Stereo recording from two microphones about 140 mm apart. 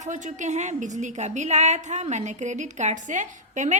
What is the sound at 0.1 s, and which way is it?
A woman's voice, 60° right (ahead or behind).